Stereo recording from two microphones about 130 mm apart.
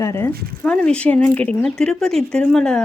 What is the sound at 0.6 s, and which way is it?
A woman's voice, 5° left (ahead or behind).